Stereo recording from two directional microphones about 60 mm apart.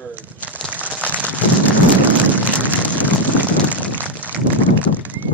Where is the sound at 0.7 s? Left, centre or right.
Left.